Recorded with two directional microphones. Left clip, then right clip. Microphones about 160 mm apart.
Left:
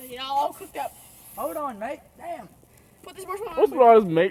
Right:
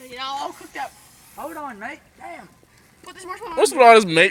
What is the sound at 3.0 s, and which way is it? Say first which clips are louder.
Speech: even; 30° left (ahead or behind).